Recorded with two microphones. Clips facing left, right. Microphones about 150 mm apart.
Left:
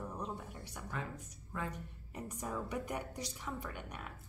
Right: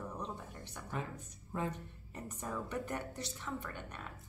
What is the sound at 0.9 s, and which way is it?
Speech, 20° right (ahead or behind).